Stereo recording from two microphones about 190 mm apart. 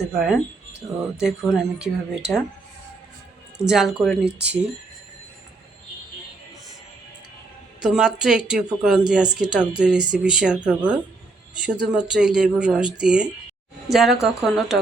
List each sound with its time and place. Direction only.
0.2 s speech: centre (ahead or behind)
3.6 s speech: centre (ahead or behind)
4.3 s speech: 65° right (ahead or behind)
7.8 s speech: 5° right (ahead or behind)